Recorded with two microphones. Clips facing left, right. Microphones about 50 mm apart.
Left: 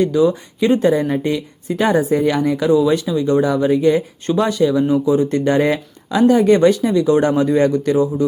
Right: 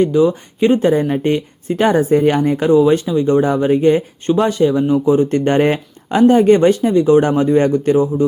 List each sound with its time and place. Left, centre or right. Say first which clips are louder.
0.0 s speech: right 2 dB; right